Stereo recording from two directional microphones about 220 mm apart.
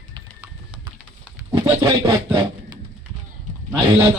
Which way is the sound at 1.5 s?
20° right (ahead or behind).